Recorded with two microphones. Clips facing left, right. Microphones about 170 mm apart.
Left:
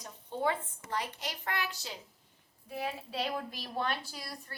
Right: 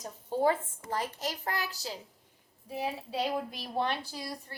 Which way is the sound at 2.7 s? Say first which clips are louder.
Right 3 dB; 20° right (ahead or behind).